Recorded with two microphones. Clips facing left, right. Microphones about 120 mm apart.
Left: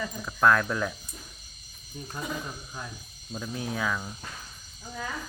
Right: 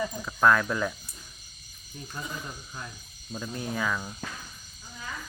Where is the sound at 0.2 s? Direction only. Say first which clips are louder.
Even; centre (ahead or behind).